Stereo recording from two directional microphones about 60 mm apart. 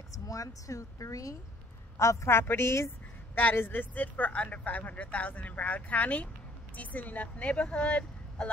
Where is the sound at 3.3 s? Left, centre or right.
Left.